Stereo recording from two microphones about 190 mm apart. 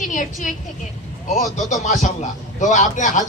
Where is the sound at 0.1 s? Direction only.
40° left (ahead or behind).